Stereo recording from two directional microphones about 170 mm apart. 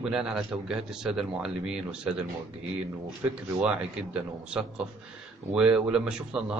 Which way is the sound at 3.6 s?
5° right (ahead or behind).